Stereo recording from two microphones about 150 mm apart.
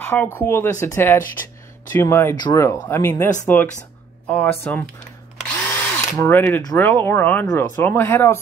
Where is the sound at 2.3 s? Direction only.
25° left (ahead or behind); by 4.8 s 10° left (ahead or behind).